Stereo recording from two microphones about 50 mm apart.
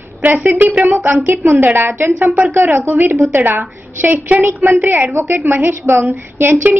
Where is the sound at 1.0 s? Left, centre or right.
Right.